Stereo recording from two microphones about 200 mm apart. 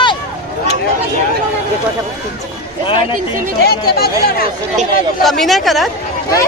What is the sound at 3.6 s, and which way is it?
Speech, 50° left (ahead or behind).